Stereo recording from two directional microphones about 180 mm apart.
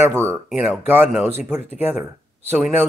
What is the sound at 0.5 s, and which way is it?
Speech, centre (ahead or behind).